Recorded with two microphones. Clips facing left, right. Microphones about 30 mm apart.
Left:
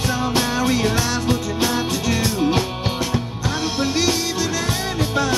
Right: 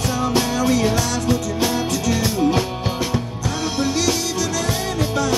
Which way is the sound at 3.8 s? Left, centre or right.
Left.